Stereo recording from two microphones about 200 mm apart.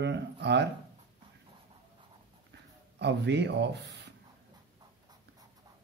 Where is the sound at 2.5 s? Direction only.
60° right (ahead or behind).